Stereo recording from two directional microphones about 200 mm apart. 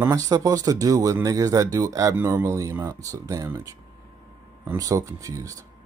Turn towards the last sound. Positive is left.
turn(degrees=-15)  # may be behind; listen again after turning